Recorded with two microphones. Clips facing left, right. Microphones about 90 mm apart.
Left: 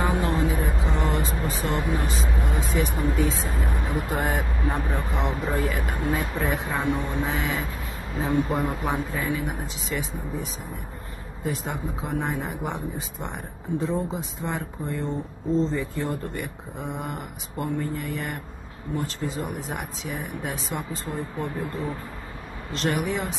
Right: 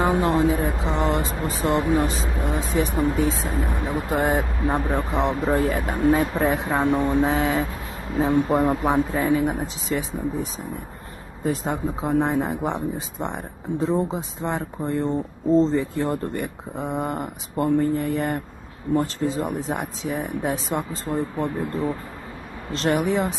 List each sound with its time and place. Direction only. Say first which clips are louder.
0.1 s speech: right 5 dB; 35° right (ahead or behind)
22.7 s speech: right 4 dB; 35° right (ahead or behind)